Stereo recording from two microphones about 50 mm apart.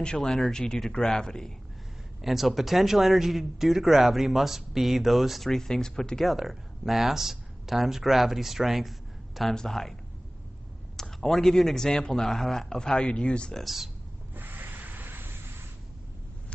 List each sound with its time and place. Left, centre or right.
0.0 s speech: centre
2.2 s speech: centre
5.5 s speech: centre
6.3 s speech: centre
11.0 s speech: centre
13.6 s speech: centre
14.3 s rub: right